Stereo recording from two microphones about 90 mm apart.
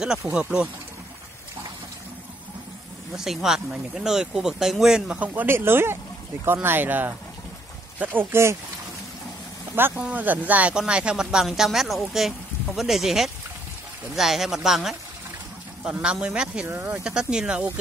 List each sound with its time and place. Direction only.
0.3 s speech: 10° right (ahead or behind)
3.2 s speech: 5° right (ahead or behind); by 8.5 s 30° right (ahead or behind)
9.9 s speech: 15° right (ahead or behind)
16.6 s speech: 25° right (ahead or behind)
17.0 s speech: 10° right (ahead or behind)